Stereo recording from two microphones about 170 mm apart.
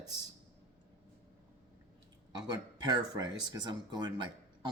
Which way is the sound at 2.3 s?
25° right (ahead or behind).